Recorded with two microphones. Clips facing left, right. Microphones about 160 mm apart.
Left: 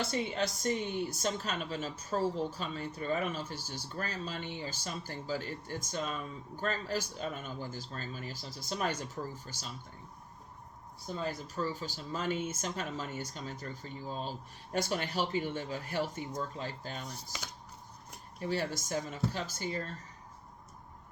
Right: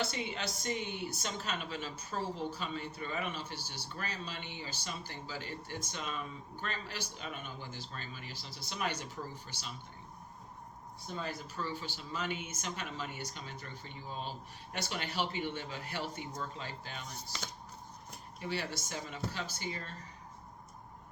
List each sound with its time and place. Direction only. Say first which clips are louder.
0.1 s a woman's voice: left 6 dB; 40° left (ahead or behind)
11.3 s speech: left 5 dB; 40° left (ahead or behind)
18.3 s a woman's voice: left 4 dB; 45° left (ahead or behind)